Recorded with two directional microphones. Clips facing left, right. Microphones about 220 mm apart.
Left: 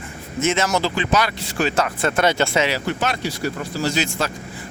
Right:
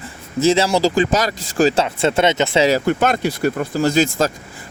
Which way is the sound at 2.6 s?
45° right (ahead or behind).